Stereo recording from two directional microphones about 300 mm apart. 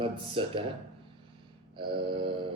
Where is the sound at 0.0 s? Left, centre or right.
Centre.